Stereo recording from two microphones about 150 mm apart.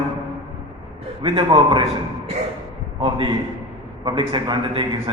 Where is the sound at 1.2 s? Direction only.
40° right (ahead or behind).